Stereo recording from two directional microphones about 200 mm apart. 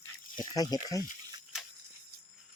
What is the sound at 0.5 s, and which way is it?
Speech, 20° left (ahead or behind).